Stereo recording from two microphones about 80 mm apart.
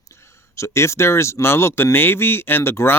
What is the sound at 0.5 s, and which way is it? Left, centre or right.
Speech, left.